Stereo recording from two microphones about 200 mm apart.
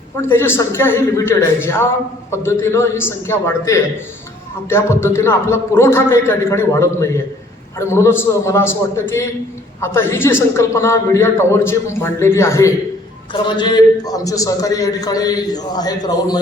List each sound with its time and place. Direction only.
0.2 s a man's voice: 10° left (ahead or behind)